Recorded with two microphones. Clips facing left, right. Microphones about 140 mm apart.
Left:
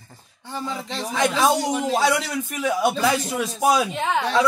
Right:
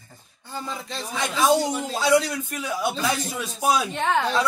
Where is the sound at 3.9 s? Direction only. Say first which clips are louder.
Even; 5° left (ahead or behind).